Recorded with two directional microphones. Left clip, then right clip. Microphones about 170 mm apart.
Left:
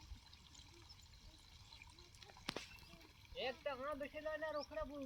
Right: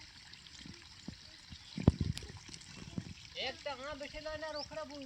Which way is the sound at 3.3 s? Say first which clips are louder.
Right 4 dB; 35° left (ahead or behind).